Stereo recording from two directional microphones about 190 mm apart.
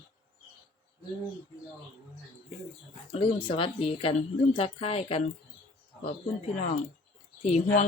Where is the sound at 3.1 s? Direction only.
30° left (ahead or behind).